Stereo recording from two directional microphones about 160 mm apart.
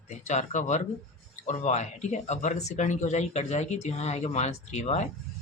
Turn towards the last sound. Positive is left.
turn(degrees=45)  # may be behind; listen again after turning